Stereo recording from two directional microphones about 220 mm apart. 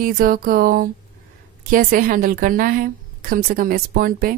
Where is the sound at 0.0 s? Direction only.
40° right (ahead or behind).